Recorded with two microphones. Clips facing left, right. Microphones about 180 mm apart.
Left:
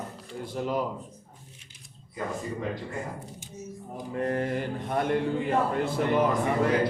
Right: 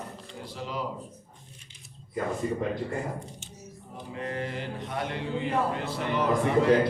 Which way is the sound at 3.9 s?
50° left (ahead or behind).